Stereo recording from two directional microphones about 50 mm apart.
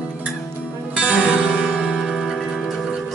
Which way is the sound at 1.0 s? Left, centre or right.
Right.